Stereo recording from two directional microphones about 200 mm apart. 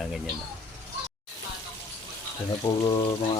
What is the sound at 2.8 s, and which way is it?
Speech, 20° left (ahead or behind).